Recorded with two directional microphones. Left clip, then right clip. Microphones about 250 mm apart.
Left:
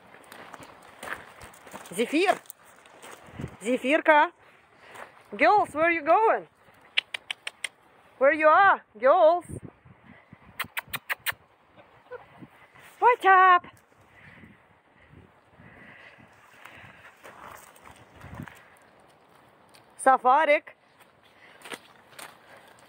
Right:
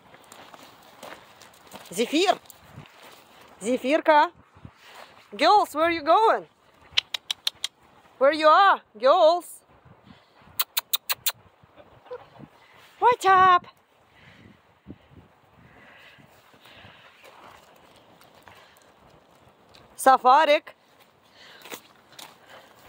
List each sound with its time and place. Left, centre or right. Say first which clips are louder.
2.0 s speech: right 2 dB; centre
3.6 s speech: right 1 dB; centre
8.2 s speech: right 2 dB; centre
10.6 s a sound: right 4 dB; centre
13.0 s speech: right 1 dB; centre
20.0 s speech: right 3 dB; centre
21.6 s walk: left 2 dB; centre